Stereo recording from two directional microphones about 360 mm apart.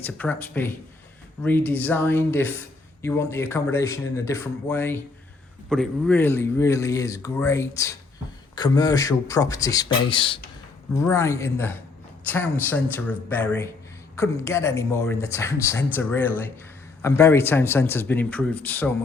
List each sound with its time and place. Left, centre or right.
0.0 s a man's voice: centre